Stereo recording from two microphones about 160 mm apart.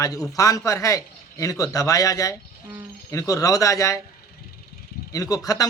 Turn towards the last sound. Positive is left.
turn(degrees=20)  # may be behind; listen again after turning